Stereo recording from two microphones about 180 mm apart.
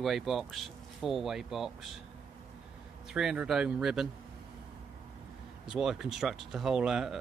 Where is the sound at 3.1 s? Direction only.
5° right (ahead or behind).